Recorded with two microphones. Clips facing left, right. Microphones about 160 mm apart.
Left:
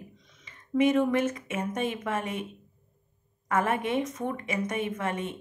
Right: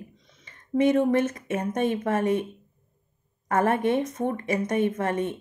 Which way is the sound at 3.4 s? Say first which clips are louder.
Right 5 dB; 40° right (ahead or behind).